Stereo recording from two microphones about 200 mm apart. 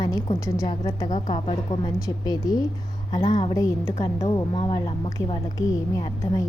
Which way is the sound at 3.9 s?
30° left (ahead or behind).